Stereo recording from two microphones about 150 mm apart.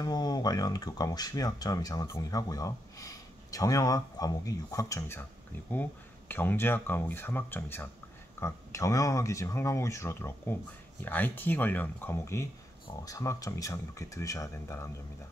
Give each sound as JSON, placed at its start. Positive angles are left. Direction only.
{"t": 0.0, "sound": "speech", "side_deg": 25}